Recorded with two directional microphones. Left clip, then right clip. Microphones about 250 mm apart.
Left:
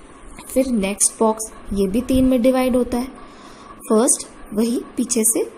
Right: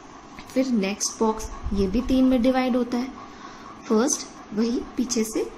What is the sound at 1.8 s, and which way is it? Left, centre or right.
A woman's voice, centre.